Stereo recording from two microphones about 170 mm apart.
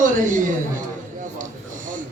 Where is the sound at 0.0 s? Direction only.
50° right (ahead or behind).